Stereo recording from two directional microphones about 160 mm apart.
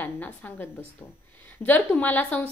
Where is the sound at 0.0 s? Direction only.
10° left (ahead or behind).